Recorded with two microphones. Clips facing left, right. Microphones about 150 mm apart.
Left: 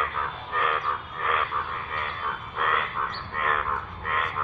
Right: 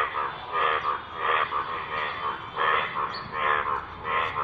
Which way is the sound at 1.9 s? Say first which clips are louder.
Even; 5° right (ahead or behind).